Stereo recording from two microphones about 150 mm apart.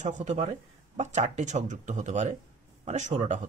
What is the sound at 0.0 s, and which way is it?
Speech, 50° right (ahead or behind).